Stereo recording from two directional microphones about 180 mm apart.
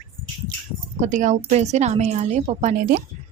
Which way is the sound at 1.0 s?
45° right (ahead or behind).